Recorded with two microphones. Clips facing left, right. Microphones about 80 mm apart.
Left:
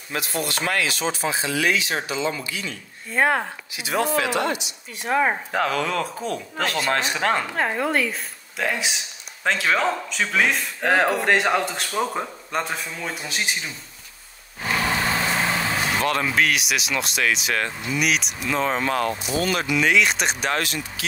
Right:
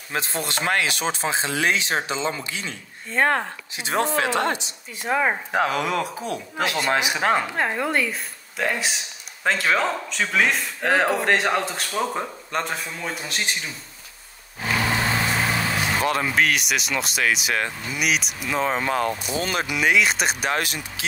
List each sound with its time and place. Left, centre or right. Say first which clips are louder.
0.1 s speech: even; right
3.1 s speech: even; centre
4.2 s speech: right 1 dB; right
4.9 s speech: left 1 dB; centre
5.5 s speech: right 1 dB; centre
7.5 s speech: left 1 dB; centre
15.5 s speech: even; centre
19.3 s speech: left 5 dB; right
19.6 s speech: right 1 dB; centre